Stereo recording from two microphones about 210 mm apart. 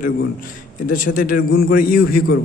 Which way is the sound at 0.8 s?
40° left (ahead or behind).